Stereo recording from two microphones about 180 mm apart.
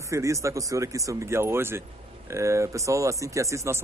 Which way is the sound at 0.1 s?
15° right (ahead or behind).